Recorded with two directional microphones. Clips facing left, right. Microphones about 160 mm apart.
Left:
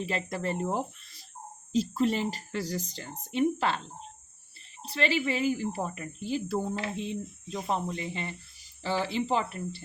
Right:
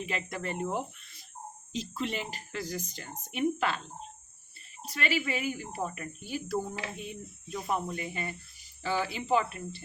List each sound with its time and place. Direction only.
0.0 s speech: 35° left (ahead or behind)
4.8 s speech: 30° left (ahead or behind)